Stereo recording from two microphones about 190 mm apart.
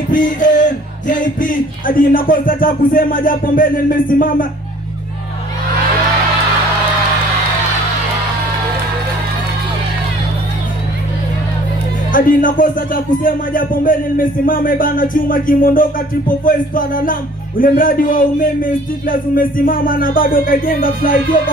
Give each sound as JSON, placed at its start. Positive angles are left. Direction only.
{"t": 0.1, "sound": "speech", "side_deg": 45}
{"t": 12.1, "sound": "speech", "side_deg": 45}